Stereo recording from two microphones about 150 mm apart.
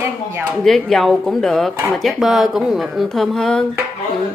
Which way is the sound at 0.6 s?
Centre (ahead or behind).